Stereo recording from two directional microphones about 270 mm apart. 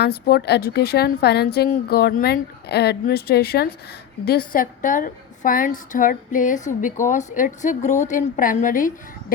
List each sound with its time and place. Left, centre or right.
0.0 s a woman's voice: left